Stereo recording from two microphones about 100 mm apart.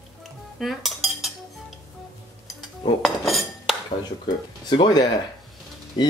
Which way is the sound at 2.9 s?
Centre (ahead or behind).